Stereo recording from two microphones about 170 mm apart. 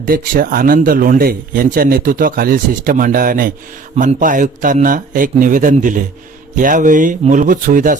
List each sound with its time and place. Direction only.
0.0 s a man's voice: 60° right (ahead or behind)